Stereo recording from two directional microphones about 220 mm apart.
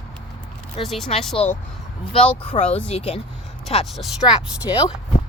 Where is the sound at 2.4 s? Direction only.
25° left (ahead or behind).